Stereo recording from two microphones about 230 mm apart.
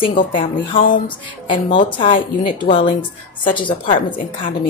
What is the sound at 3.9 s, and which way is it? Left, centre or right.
Speech, left.